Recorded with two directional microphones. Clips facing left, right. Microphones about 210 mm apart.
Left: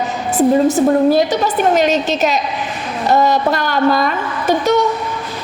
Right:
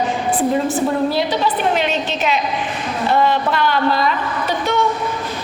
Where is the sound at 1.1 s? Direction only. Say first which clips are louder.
Left 4 dB; 45° left (ahead or behind).